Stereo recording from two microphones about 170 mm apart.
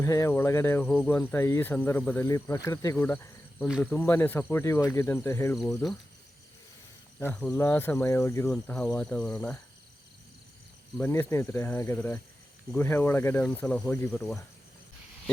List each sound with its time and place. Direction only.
0.0 s speech: 20° left (ahead or behind)
5.5 s speech: centre (ahead or behind)
7.2 s speech: 10° left (ahead or behind)
8.4 s speech: 5° left (ahead or behind)
10.9 s speech: 10° left (ahead or behind)